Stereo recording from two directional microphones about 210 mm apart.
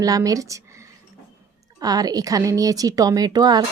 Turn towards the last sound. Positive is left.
turn(degrees=-20)  # may be behind; listen again after turning